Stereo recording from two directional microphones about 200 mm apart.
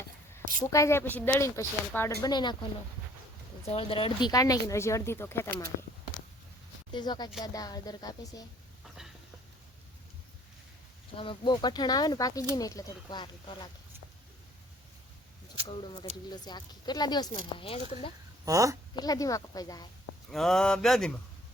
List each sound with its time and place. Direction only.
0.7 s speech: 15° left (ahead or behind)
3.7 s speech: 25° left (ahead or behind); by 5.6 s 10° left (ahead or behind)
6.9 s speech: 20° left (ahead or behind)
9.0 s a sound: centre (ahead or behind)
11.2 s speech: 25° left (ahead or behind)
15.6 s speech: 25° left (ahead or behind)
18.4 s a woman's voice: 15° right (ahead or behind)
18.9 s speech: 20° left (ahead or behind)
20.3 s speech: centre (ahead or behind)